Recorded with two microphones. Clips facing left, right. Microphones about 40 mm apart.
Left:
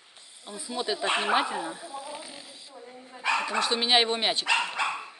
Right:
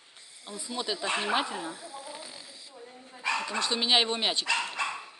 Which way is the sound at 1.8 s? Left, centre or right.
Left.